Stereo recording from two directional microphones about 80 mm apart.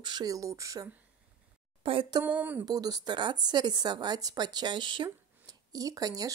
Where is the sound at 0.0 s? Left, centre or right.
Right.